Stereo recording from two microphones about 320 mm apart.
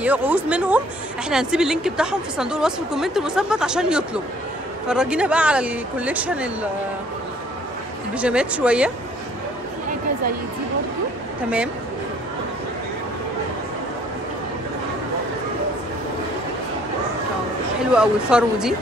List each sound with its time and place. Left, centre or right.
0.0 s a woman's voice: centre
8.2 s a woman's voice: centre
17.9 s a woman's voice: centre